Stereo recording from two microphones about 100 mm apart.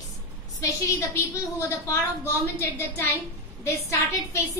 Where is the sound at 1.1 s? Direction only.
30° left (ahead or behind).